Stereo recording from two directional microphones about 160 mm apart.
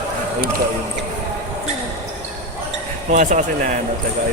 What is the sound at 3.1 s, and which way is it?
Speech, 50° right (ahead or behind).